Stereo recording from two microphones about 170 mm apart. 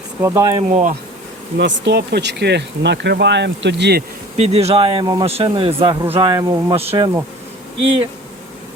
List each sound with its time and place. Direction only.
0.2 s speech: 15° right (ahead or behind)
0.7 s speech: 50° right (ahead or behind)
1.5 s speech: 90° right
4.4 s speech: 40° right (ahead or behind)